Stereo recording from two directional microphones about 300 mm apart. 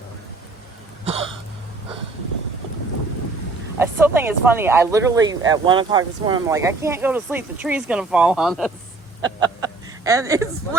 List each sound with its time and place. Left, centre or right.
1.0 s a sound: centre
3.8 s speech: centre
9.2 s speech: centre